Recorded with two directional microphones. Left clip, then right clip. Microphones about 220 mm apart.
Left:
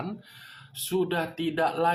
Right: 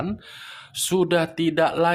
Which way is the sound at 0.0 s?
40° right (ahead or behind).